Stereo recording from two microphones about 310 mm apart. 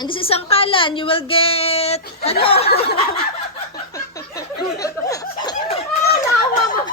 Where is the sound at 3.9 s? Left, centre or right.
Centre.